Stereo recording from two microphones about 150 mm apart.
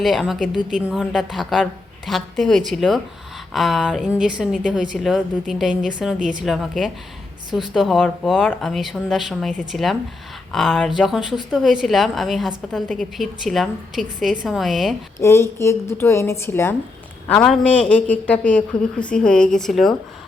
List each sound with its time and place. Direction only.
0.0 s a woman's voice: centre (ahead or behind)
15.2 s a man's voice: 15° left (ahead or behind)